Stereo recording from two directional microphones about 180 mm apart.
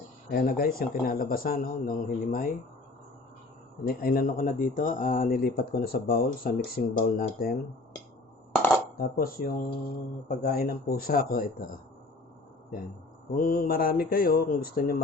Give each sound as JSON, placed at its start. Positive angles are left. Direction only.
{"t": 0.3, "sound": "speech", "side_deg": 60}
{"t": 3.8, "sound": "speech", "side_deg": 55}
{"t": 9.0, "sound": "speech", "side_deg": 55}
{"t": 13.3, "sound": "speech", "side_deg": 50}